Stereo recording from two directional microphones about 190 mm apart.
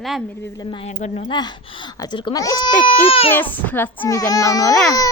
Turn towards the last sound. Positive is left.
turn(degrees=20)  # may be behind; listen again after turning